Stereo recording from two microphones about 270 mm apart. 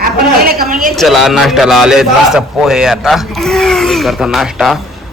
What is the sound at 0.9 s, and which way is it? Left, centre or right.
A man's voice, centre.